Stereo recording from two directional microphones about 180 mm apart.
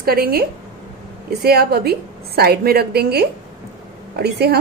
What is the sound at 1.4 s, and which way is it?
A woman's voice, 60° right (ahead or behind).